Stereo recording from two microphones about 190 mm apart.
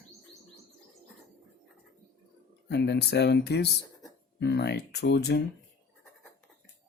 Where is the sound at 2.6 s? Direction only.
60° left (ahead or behind).